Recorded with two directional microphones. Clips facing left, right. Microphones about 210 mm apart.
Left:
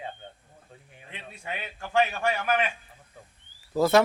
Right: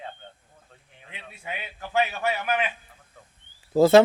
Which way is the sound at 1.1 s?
5° right (ahead or behind).